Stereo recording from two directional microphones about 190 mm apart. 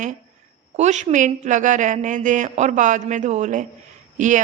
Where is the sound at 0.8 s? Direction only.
35° right (ahead or behind).